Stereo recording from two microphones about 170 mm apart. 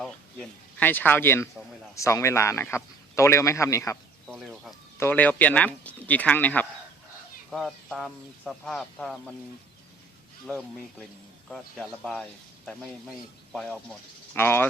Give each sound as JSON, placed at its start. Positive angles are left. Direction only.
{"t": 0.0, "sound": "a man's voice", "side_deg": 5}
{"t": 4.3, "sound": "chicken", "side_deg": -5}
{"t": 4.9, "sound": "a man's voice", "side_deg": 10}
{"t": 10.4, "sound": "speech", "side_deg": 5}
{"t": 14.3, "sound": "a man's voice", "side_deg": 15}